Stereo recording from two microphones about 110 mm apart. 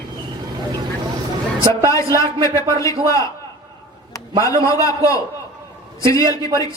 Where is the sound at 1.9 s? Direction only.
30° left (ahead or behind).